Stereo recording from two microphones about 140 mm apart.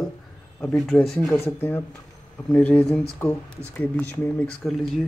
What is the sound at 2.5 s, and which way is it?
Speech, 10° left (ahead or behind).